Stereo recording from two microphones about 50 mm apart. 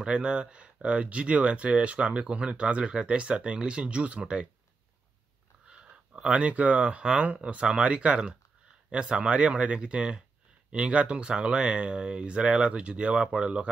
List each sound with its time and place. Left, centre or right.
0.0 s speech: right
5.7 s speech: right